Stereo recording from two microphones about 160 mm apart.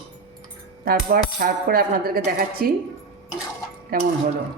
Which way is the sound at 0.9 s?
65° right (ahead or behind).